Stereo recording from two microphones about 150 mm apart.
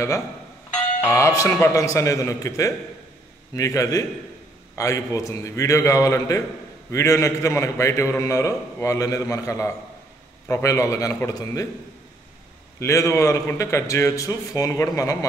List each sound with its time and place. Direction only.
1.0 s a man's voice: 20° left (ahead or behind)
12.7 s a man's voice: 20° left (ahead or behind)